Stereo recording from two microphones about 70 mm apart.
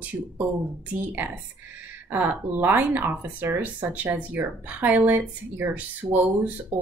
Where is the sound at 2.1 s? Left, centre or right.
Right.